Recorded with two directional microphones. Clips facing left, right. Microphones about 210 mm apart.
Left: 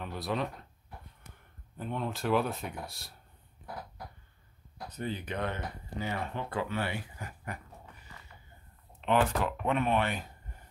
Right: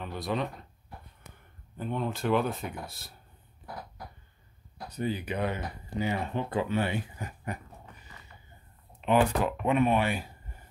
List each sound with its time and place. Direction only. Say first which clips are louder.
0.0 s speech: right 2 dB; centre (ahead or behind)
1.8 s speech: right 3 dB; centre (ahead or behind)
4.8 s speech: right 5 dB; 10° right (ahead or behind)
9.0 s speech: right 3 dB; 10° right (ahead or behind)